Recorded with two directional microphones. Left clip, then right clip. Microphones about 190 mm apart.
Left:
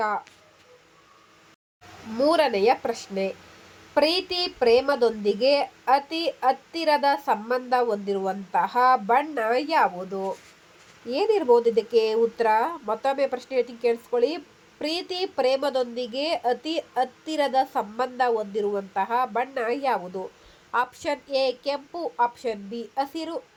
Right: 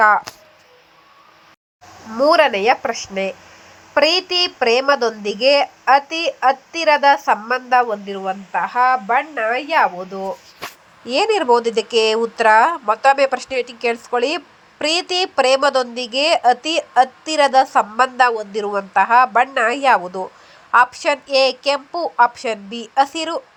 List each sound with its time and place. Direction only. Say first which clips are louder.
2.1 s a woman's voice: right 8 dB; 15° right (ahead or behind)
9.7 s speech: right 6 dB; 20° right (ahead or behind)